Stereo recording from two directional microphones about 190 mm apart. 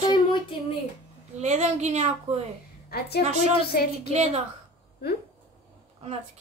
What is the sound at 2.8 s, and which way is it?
A woman's voice, 60° left (ahead or behind).